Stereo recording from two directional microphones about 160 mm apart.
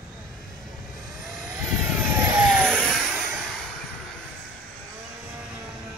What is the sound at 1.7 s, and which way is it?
Vehicle, 5° right (ahead or behind).